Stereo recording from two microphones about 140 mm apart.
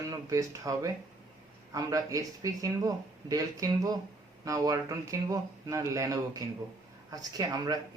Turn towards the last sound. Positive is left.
turn(degrees=-30)  # may be behind; listen again after turning